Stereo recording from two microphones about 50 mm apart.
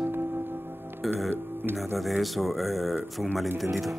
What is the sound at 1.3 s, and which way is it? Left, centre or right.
Speech, right.